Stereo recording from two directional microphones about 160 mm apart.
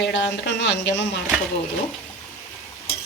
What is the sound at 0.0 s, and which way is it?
Speech, 90° left.